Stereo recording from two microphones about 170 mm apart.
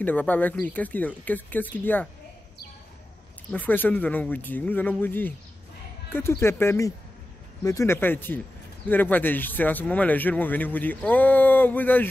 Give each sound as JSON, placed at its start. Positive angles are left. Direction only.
{"t": 0.0, "sound": "speech", "side_deg": 10}
{"t": 3.5, "sound": "speech", "side_deg": 10}